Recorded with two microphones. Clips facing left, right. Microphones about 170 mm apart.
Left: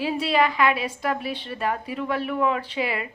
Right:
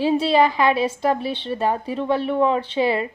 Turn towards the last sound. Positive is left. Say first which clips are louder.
# right 7 dB
turn(degrees=-30)  # may be behind; listen again after turning